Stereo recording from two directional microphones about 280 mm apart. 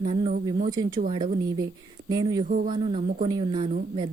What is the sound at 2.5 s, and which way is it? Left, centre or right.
Speech, right.